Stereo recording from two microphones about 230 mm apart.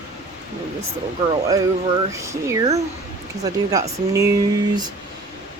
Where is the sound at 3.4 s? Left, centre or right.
Centre.